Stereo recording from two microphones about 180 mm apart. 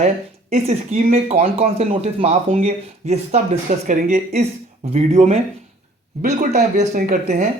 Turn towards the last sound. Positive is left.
turn(degrees=-45)  # may be behind; listen again after turning